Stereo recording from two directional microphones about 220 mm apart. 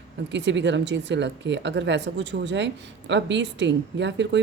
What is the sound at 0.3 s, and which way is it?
Speech, 55° right (ahead or behind).